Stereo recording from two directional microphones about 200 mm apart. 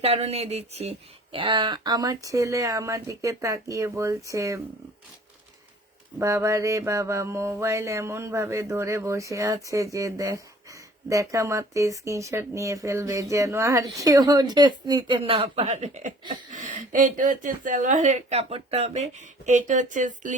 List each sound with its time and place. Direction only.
0.0 s speech: 30° right (ahead or behind); by 4.6 s 15° right (ahead or behind)
6.1 s speech: 15° right (ahead or behind); by 20.3 s 40° right (ahead or behind)